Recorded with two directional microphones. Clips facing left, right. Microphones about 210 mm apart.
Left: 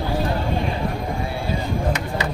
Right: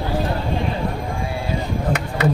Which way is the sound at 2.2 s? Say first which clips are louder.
Right 7 dB; 60° right (ahead or behind).